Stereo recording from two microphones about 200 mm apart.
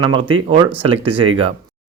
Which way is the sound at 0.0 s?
25° right (ahead or behind).